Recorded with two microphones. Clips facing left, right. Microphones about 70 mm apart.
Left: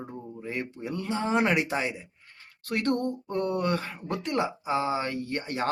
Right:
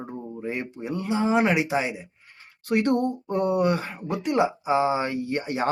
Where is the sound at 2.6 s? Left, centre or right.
Centre.